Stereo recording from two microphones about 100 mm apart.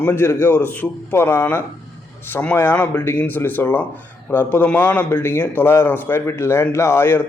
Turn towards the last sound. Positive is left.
turn(degrees=25)  # may be behind; listen again after turning